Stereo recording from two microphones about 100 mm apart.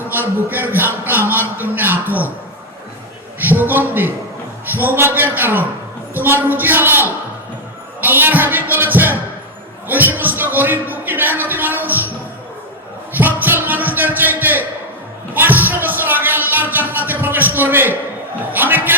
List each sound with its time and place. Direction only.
0.3 s music: 20° right (ahead or behind)
3.4 s music: 20° right (ahead or behind)
9.9 s a man's voice: 20° right (ahead or behind)
13.1 s music: 20° right (ahead or behind)
18.5 s a sound: 20° right (ahead or behind)